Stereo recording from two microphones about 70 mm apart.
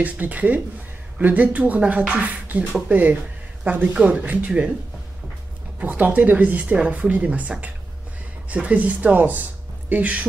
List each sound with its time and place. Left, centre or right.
0.0 s speech: right
5.8 s speech: right